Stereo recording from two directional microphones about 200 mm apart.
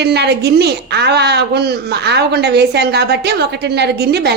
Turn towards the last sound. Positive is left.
turn(degrees=-55)  # may be behind; listen again after turning